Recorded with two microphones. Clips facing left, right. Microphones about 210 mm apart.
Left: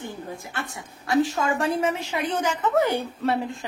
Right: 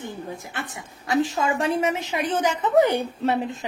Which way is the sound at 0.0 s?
20° right (ahead or behind).